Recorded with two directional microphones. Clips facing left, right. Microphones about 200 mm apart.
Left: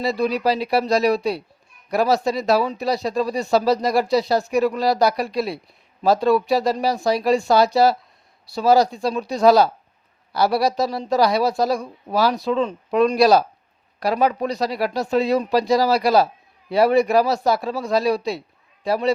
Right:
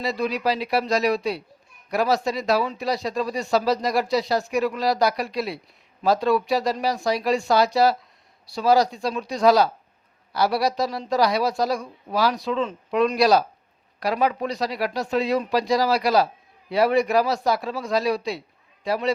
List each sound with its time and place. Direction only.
0.0 s speech: 35° left (ahead or behind)